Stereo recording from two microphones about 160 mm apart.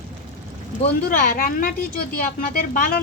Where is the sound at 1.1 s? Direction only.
60° left (ahead or behind).